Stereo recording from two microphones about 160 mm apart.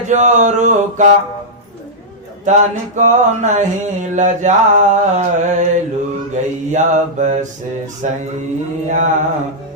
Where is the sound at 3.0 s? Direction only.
50° right (ahead or behind).